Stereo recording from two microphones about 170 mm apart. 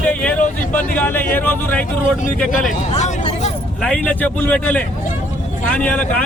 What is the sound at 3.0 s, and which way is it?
Vehicle, 40° left (ahead or behind).